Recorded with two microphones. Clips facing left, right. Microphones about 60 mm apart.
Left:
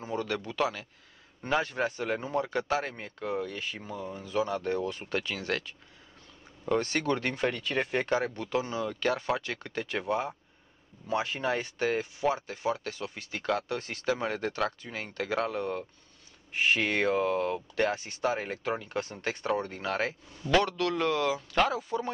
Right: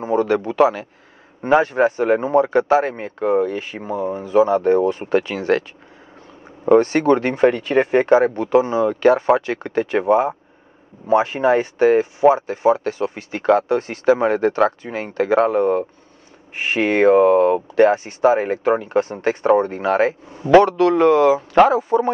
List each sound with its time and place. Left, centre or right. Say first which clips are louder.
0.0 s speech: right 15 dB; right